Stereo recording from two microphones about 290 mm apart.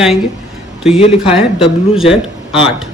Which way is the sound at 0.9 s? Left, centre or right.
Centre.